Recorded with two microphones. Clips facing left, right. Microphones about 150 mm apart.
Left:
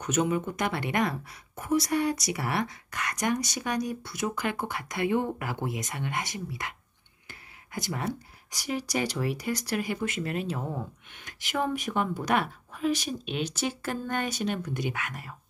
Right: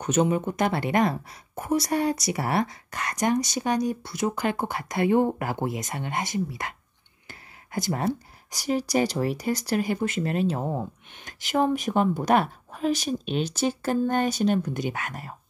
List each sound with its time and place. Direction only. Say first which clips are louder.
0.0 s speech: right 4 dB; 30° right (ahead or behind)
7.2 s a sound: right 4 dB; 35° right (ahead or behind)
8.5 s speech: right 6 dB; 35° right (ahead or behind)